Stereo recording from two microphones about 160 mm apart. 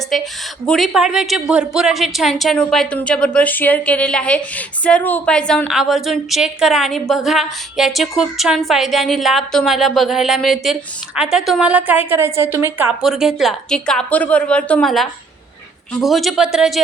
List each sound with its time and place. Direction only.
0.1 s a woman's voice: 5° left (ahead or behind)